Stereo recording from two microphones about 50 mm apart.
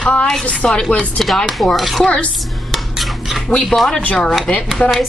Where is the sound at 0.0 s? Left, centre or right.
Left.